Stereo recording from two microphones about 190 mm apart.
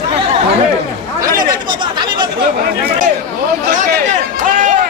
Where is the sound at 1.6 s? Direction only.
25° right (ahead or behind).